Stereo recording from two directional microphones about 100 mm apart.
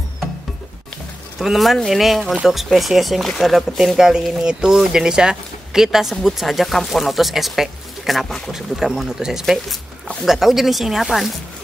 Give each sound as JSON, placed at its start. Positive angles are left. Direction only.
{"t": 1.4, "sound": "speech", "side_deg": 0}